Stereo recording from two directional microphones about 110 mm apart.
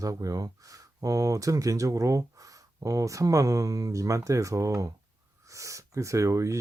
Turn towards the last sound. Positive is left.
turn(degrees=-30)  # may be behind; listen again after turning